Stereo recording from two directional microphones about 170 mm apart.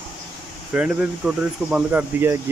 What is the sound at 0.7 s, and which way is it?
Speech, 5° right (ahead or behind).